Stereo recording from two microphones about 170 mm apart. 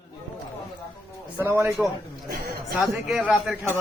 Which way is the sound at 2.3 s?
60° right (ahead or behind).